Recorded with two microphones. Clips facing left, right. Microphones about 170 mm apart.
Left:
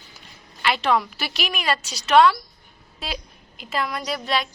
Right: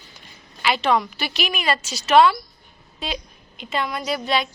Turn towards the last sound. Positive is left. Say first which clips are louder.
# right 2 dB
turn(degrees=0)  # may be behind; listen again after turning